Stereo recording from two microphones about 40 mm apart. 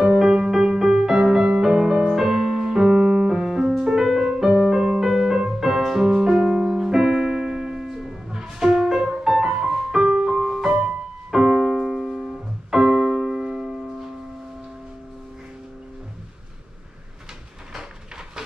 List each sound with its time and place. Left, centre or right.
0.0 s music: centre
1.2 s music: centre
3.4 s music: centre
10.3 s music: centre
11.3 s piano: centre